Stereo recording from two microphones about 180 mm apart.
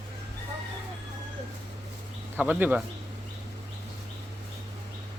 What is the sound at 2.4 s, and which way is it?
Speech, 10° right (ahead or behind).